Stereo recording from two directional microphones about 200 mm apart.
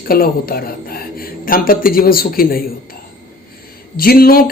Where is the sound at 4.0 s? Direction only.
50° left (ahead or behind).